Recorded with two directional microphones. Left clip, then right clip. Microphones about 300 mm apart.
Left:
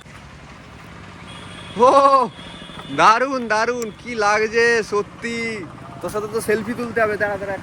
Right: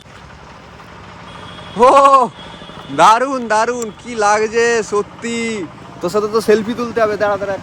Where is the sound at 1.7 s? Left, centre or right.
Centre.